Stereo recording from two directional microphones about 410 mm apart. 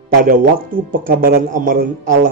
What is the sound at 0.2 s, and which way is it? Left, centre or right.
Speech, right.